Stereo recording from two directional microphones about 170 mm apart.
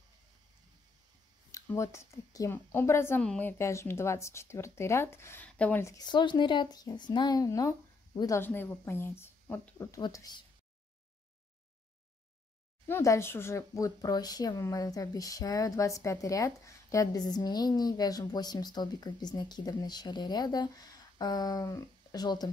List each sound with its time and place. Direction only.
1.5 s a woman's voice: 15° left (ahead or behind)
8.4 s a woman's voice: 10° left (ahead or behind)
12.8 s speech: 15° left (ahead or behind)